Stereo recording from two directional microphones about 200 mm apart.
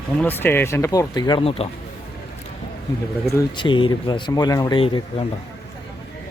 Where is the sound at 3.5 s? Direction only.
25° left (ahead or behind).